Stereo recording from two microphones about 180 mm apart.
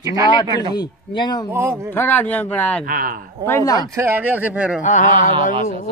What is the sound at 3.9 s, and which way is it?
Speech, 15° right (ahead or behind).